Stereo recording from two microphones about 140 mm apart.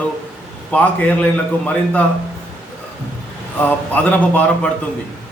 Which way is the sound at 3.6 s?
10° left (ahead or behind).